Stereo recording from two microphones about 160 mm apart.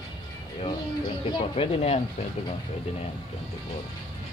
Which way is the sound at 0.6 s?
35° left (ahead or behind).